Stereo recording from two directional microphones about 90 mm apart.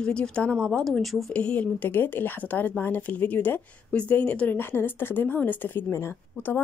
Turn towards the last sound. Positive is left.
turn(degrees=25)  # may be behind; listen again after turning